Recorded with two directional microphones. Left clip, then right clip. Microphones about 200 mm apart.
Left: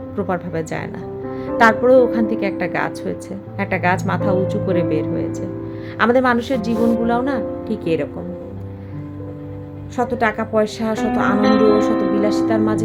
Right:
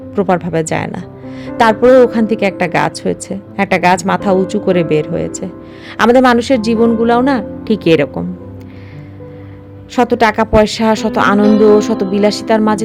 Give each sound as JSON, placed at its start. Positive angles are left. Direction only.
{"t": 0.2, "sound": "a woman's voice", "side_deg": -40}
{"t": 9.9, "sound": "a woman's voice", "side_deg": -45}